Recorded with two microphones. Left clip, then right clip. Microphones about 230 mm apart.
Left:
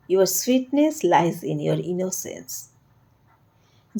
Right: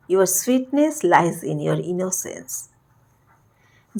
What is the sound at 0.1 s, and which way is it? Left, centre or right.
Speech, centre.